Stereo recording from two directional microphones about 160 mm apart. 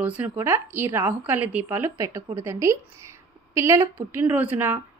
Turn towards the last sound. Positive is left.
turn(degrees=-15)  # may be behind; listen again after turning